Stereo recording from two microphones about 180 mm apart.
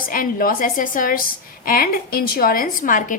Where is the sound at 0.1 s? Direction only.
50° left (ahead or behind).